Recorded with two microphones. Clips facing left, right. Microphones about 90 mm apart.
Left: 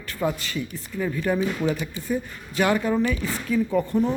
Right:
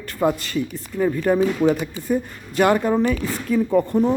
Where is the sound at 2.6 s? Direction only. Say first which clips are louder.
Right 4 dB; 40° right (ahead or behind).